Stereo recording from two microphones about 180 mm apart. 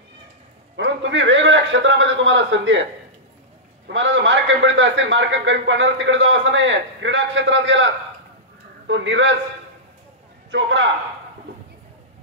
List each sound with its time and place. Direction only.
0.7 s a sound: 85° right
3.8 s a man's voice: 85° right
10.5 s a man's voice: 85° right